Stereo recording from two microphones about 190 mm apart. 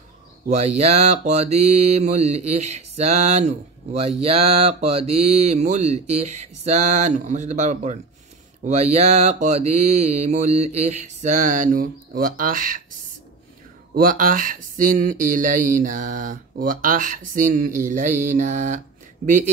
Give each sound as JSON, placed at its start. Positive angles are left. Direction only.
{"t": 0.5, "sound": "mantra", "side_deg": -35}
{"t": 13.9, "sound": "speech", "side_deg": -45}
{"t": 19.2, "sound": "mantra", "side_deg": -40}